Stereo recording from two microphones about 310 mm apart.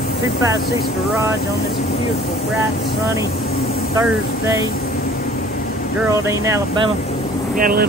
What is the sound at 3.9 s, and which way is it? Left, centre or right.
Speech, centre.